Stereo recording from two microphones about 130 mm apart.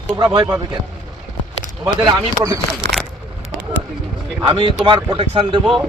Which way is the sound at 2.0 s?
30° right (ahead or behind).